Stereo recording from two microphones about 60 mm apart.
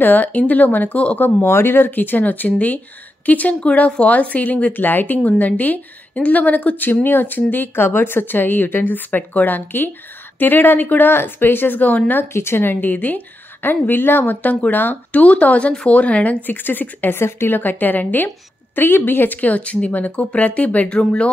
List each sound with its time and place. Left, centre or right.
0.0 s speech: left
1.4 s a woman's voice: left
12.3 s a woman's voice: left; by 21.3 s centre